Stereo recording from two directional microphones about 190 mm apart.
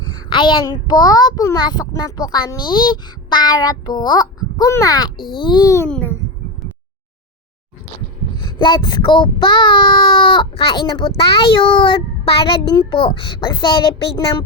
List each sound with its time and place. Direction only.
0.3 s a child's voice: 25° left (ahead or behind); by 6.1 s 10° left (ahead or behind)
8.4 s a child's voice: 25° left (ahead or behind)